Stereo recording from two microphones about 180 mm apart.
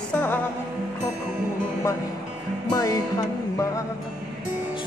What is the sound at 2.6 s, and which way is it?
Music, 20° left (ahead or behind).